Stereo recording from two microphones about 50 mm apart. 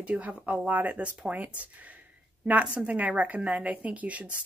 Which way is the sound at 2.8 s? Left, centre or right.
Right.